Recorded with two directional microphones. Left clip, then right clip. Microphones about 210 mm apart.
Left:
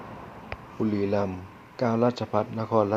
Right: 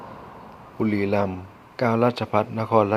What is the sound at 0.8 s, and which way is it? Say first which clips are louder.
A man's voice: right 4 dB; 20° right (ahead or behind).